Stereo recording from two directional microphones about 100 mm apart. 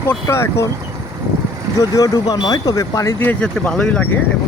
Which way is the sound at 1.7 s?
40° left (ahead or behind).